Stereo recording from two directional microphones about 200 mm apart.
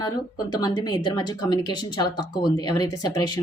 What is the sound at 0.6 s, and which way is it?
Speech, 20° left (ahead or behind).